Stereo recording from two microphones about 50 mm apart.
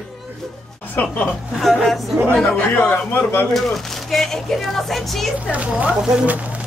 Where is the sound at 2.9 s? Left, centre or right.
Left.